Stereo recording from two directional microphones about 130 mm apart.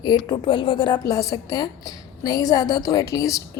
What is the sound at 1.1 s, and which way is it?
A woman's voice, 25° left (ahead or behind).